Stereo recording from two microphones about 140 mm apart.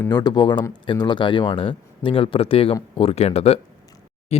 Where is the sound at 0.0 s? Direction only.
30° left (ahead or behind).